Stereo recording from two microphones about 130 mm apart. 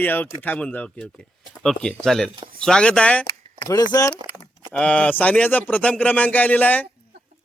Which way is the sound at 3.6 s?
30° left (ahead or behind).